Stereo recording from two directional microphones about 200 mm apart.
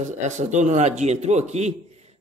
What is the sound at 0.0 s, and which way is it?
A man's voice, 35° right (ahead or behind).